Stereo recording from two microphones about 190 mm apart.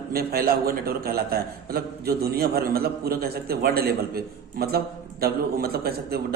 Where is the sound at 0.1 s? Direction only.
55° right (ahead or behind).